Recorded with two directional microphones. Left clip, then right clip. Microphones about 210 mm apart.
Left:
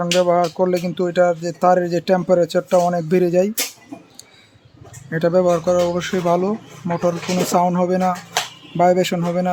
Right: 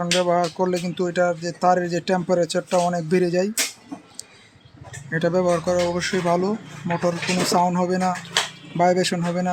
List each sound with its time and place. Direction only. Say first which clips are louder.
0.0 s speech: left 4 dB; 10° left (ahead or behind)
5.1 s speech: left 4 dB; 15° left (ahead or behind)